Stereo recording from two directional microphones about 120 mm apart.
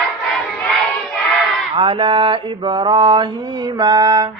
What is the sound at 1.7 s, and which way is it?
Mantra, 45° right (ahead or behind).